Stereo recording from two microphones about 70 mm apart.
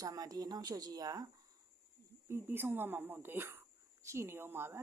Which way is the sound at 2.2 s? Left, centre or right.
Right.